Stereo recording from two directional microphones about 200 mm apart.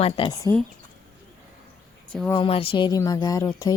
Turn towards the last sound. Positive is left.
turn(degrees=20)  # may be behind; listen again after turning